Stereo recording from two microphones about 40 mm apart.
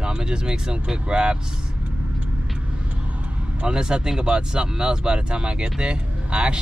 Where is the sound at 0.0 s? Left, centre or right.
Right.